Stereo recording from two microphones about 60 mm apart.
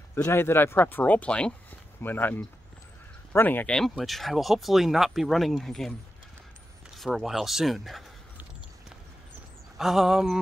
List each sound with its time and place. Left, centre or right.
0.2 s speech: left; by 1.5 s centre
1.7 s a sound: left
3.3 s speech: left
3.6 s speech: centre
3.9 s speech: centre
7.0 s speech: centre
9.8 s speech: centre